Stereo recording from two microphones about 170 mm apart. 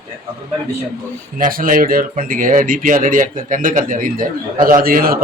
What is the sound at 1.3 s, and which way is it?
Speech, 55° right (ahead or behind).